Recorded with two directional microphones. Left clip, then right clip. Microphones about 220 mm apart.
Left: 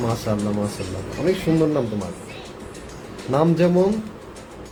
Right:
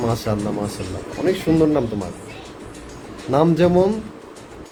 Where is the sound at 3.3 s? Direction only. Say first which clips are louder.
Right 2 dB; 35° right (ahead or behind).